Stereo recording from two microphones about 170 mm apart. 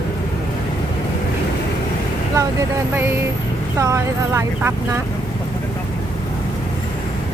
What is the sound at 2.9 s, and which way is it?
Speech, 15° right (ahead or behind).